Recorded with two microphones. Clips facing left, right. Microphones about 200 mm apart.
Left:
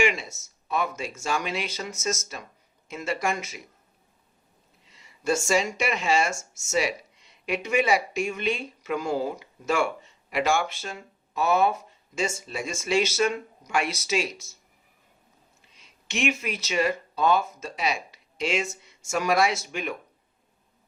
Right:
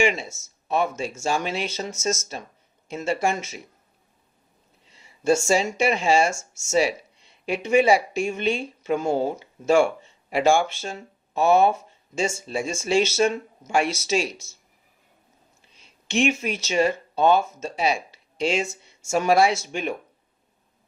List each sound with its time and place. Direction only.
0.0 s speech: 25° right (ahead or behind)
4.9 s speech: 30° right (ahead or behind)
16.0 s speech: 30° right (ahead or behind)